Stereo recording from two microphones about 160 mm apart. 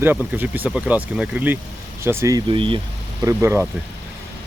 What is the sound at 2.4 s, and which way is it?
Speech, 30° right (ahead or behind).